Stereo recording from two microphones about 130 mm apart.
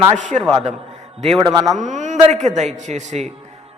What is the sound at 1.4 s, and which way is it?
Speech, 30° right (ahead or behind).